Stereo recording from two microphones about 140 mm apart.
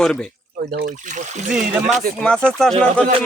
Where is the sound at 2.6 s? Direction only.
5° left (ahead or behind).